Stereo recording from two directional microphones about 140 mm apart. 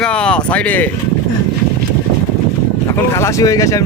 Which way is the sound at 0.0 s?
5° left (ahead or behind).